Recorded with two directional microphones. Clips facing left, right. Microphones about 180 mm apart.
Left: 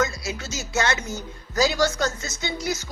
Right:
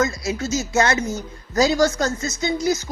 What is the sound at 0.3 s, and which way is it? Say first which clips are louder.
Speech: right 8 dB; 35° right (ahead or behind).